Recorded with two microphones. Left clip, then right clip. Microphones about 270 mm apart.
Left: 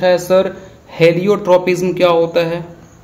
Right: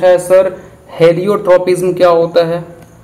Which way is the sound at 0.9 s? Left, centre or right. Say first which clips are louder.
Right 2 dB; left.